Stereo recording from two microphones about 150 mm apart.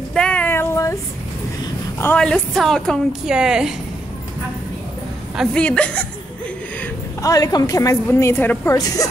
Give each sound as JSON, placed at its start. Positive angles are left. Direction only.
{"t": 0.1, "sound": "female singing", "side_deg": 5}
{"t": 2.0, "sound": "a woman's voice", "side_deg": 10}
{"t": 5.3, "sound": "a woman's voice", "side_deg": -5}
{"t": 6.8, "sound": "a woman's voice", "side_deg": 20}